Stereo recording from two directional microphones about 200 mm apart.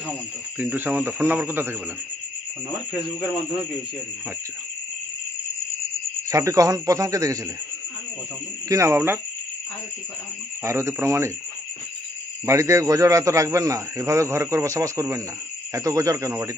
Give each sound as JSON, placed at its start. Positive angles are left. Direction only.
{"t": 0.6, "sound": "a man's voice", "side_deg": -10}
{"t": 6.2, "sound": "a man's voice", "side_deg": -15}
{"t": 8.6, "sound": "a man's voice", "side_deg": -15}
{"t": 10.6, "sound": "a man's voice", "side_deg": -15}
{"t": 12.4, "sound": "a man's voice", "side_deg": -15}